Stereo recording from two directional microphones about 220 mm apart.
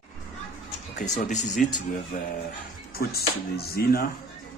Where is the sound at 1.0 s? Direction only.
35° left (ahead or behind).